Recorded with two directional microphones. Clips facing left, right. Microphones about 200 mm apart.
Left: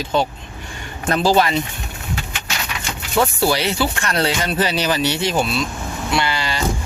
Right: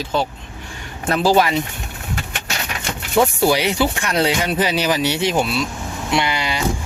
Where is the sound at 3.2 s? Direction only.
15° right (ahead or behind).